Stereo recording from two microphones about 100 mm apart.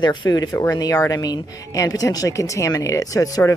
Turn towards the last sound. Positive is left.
turn(degrees=30)  # may be behind; listen again after turning